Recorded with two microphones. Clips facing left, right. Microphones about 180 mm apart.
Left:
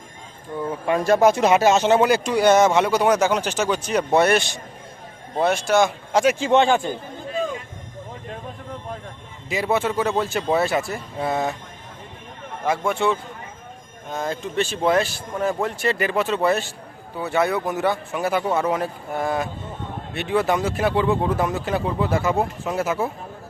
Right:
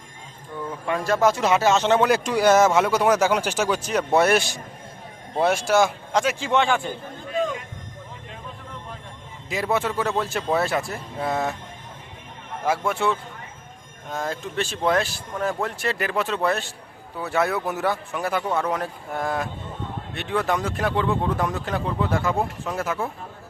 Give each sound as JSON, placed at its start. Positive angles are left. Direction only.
{"t": 0.9, "sound": "speech", "side_deg": 20}
{"t": 6.1, "sound": "speech", "side_deg": 20}
{"t": 9.5, "sound": "speech", "side_deg": 0}
{"t": 12.6, "sound": "speech", "side_deg": -5}